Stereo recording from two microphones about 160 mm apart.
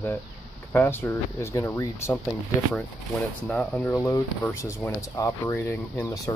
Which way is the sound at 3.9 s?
15° left (ahead or behind).